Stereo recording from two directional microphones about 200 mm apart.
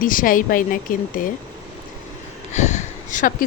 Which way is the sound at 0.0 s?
45° left (ahead or behind).